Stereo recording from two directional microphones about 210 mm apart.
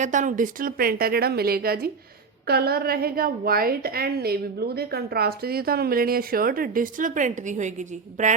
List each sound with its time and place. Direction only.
0.0 s a woman's voice: 35° right (ahead or behind)